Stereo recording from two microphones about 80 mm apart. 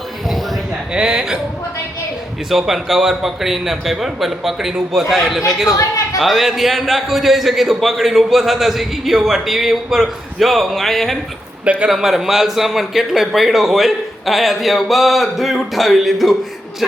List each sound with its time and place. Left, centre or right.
0.9 s a man's voice: centre
2.5 s a man's voice: centre
11.6 s speech: centre
11.9 s a man's voice: centre